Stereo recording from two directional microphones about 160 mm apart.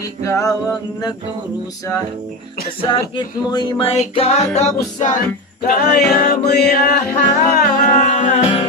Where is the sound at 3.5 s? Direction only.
25° left (ahead or behind); by 5.1 s 45° left (ahead or behind).